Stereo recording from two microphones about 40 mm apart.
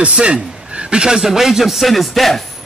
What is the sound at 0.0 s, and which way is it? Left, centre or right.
A man's voice, right.